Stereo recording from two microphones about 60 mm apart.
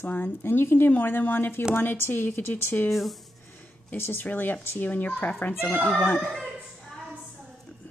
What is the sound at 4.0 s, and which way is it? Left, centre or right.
Speech, left.